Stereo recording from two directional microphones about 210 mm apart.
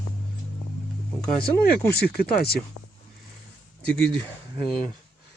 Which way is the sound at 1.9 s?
50° left (ahead or behind).